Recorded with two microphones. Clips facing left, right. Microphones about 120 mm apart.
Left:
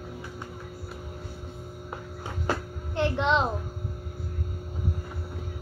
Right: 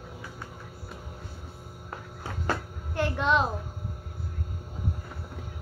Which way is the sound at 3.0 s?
20° left (ahead or behind).